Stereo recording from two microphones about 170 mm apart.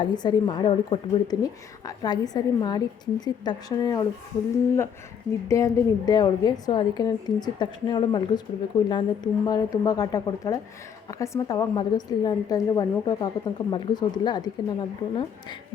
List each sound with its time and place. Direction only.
0.0 s a woman's voice: 25° left (ahead or behind)
5.5 s a woman's voice: 20° left (ahead or behind)